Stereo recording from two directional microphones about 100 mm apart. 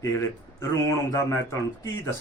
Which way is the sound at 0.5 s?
30° left (ahead or behind).